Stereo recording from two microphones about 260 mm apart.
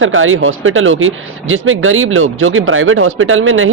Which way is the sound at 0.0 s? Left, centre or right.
Right.